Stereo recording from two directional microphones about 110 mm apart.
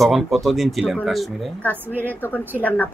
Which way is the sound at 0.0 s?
Centre (ahead or behind).